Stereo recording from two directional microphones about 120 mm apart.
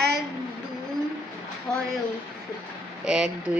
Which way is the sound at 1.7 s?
5° left (ahead or behind).